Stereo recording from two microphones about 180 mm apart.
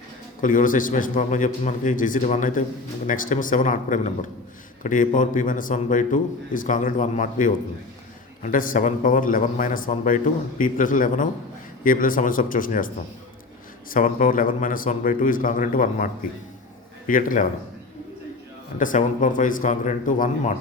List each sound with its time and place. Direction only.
0.4 s a man's voice: 45° left (ahead or behind)
13.9 s a man's voice: 50° left (ahead or behind)
17.1 s a man's voice: 50° left (ahead or behind)
18.8 s a man's voice: 45° left (ahead or behind)